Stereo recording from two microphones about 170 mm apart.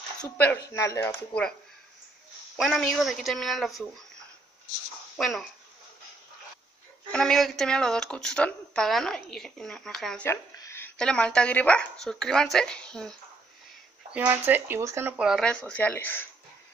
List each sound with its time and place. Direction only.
0.4 s speech: 15° left (ahead or behind)
2.5 s a woman's voice: centre (ahead or behind)
5.1 s speech: centre (ahead or behind)
7.1 s a woman's voice: 5° left (ahead or behind)
10.3 s a sound: 20° left (ahead or behind)
11.0 s a woman's voice: 5° left (ahead or behind)
14.1 s a woman's voice: 10° right (ahead or behind); by 16.3 s 10° left (ahead or behind)